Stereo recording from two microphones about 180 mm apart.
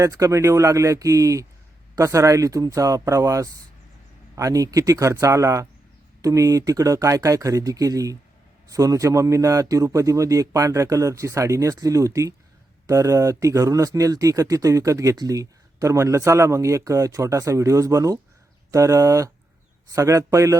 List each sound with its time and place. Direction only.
0.0 s speech: 15° right (ahead or behind)